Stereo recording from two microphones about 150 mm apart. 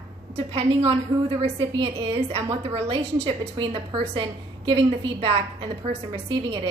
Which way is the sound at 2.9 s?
40° right (ahead or behind).